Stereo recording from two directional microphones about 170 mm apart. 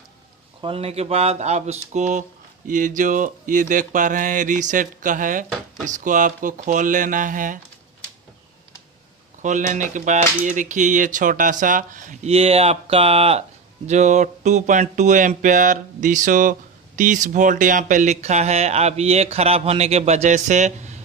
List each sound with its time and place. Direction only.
0.6 s speech: 35° right (ahead or behind); by 7.6 s 50° right (ahead or behind)
9.4 s speech: 45° right (ahead or behind)